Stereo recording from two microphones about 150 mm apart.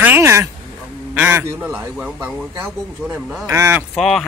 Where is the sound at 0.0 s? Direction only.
15° right (ahead or behind).